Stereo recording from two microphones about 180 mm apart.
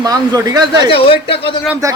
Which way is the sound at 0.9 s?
30° left (ahead or behind).